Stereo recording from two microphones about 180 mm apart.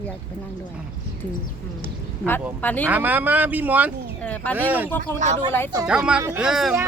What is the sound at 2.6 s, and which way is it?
Speech, 10° left (ahead or behind).